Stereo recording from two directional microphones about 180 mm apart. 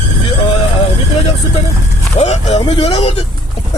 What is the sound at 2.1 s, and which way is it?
Speech, 35° left (ahead or behind).